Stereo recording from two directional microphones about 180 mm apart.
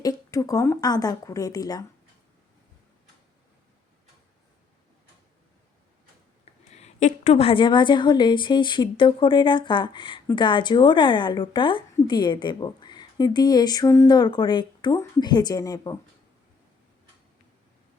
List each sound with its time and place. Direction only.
0.0 s a woman's voice: 20° left (ahead or behind)
6.4 s a woman's voice: 40° left (ahead or behind); by 16.0 s 20° left (ahead or behind)